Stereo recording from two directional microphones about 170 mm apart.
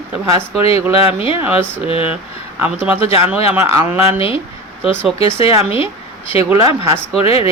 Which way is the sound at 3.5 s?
15° right (ahead or behind).